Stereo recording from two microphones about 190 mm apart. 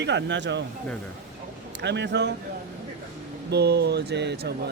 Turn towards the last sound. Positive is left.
turn(degrees=-60)  # may be behind; listen again after turning